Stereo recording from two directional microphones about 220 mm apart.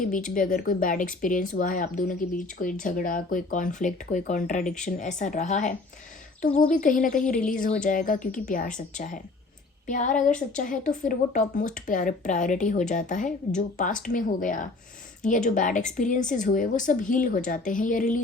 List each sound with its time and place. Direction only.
0.3 s speech: 40° left (ahead or behind)